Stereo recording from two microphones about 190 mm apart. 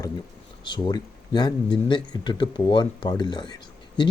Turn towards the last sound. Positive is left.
turn(degrees=25)  # may be behind; listen again after turning